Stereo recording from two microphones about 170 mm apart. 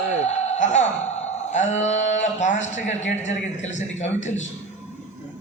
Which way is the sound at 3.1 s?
45° left (ahead or behind).